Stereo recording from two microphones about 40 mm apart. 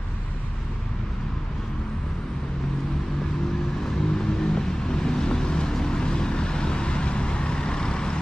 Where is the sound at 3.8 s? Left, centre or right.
Centre.